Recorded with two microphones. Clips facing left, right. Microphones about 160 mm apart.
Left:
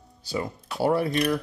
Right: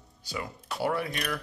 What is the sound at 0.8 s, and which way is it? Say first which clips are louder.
Speech: left 8 dB; 30° left (ahead or behind).